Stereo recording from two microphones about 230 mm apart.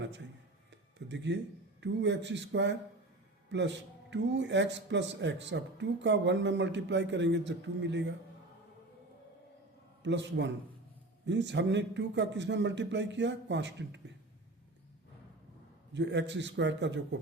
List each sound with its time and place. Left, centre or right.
0.7 s a sound: right
1.8 s speech: right
10.0 s speech: right
15.9 s speech: right